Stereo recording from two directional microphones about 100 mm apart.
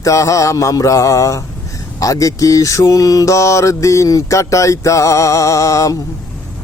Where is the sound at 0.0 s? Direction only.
30° left (ahead or behind).